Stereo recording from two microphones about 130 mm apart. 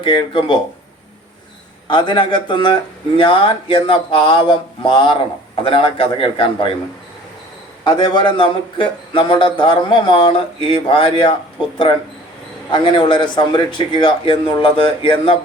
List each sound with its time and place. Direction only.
0.0 s speech: 40° left (ahead or behind)
1.9 s a man's voice: 40° left (ahead or behind)
7.9 s a man's voice: 35° left (ahead or behind)
12.7 s speech: 40° left (ahead or behind)